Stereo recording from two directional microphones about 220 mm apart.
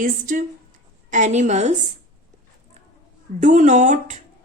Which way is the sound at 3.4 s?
35° right (ahead or behind).